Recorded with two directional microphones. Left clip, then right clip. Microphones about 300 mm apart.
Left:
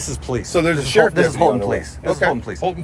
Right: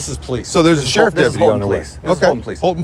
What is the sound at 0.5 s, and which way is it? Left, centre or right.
Speech, centre.